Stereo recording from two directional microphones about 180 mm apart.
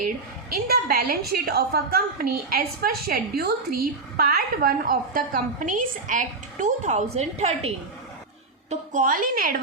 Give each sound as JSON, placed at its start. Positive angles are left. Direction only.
{"t": 0.5, "sound": "a woman's voice", "side_deg": -60}
{"t": 8.7, "sound": "a woman's voice", "side_deg": -45}